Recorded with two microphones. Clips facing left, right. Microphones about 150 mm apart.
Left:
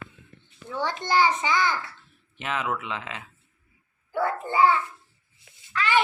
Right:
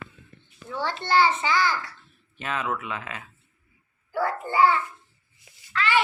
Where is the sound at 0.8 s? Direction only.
15° left (ahead or behind).